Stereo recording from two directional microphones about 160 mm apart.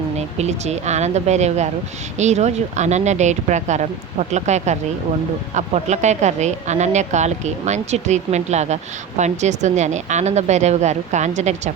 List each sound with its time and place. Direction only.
0.2 s speech: 45° right (ahead or behind)